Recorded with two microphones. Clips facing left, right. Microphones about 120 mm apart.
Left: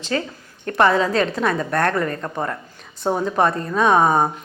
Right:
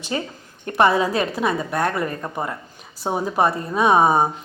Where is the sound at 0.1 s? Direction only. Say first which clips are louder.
Left 2 dB; 20° right (ahead or behind).